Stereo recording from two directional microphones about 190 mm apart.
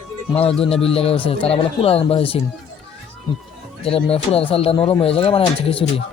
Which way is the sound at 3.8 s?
30° left (ahead or behind).